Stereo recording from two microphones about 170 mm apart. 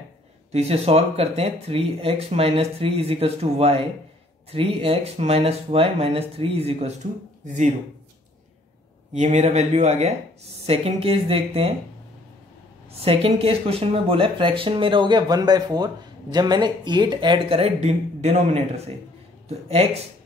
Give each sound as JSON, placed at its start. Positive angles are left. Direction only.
{"t": 0.5, "sound": "speech", "side_deg": -40}
{"t": 9.1, "sound": "speech", "side_deg": -40}
{"t": 13.0, "sound": "speech", "side_deg": -35}